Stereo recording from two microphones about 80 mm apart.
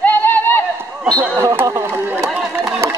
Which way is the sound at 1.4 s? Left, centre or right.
Right.